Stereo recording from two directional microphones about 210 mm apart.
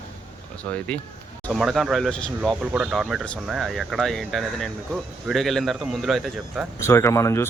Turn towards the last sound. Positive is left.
turn(degrees=10)  # may be behind; listen again after turning